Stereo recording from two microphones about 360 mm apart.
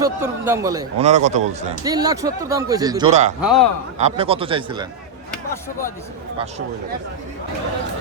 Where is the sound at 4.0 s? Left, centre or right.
Centre.